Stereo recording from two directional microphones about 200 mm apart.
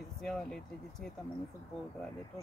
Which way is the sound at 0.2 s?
Centre (ahead or behind).